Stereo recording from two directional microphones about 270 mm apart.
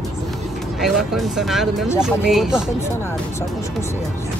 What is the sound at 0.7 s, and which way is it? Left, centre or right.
Speech, centre.